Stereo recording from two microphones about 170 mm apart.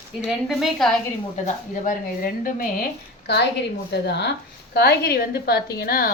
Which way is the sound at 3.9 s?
80° left.